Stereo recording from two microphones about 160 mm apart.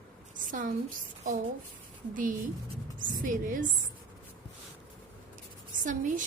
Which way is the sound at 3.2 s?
55° right (ahead or behind).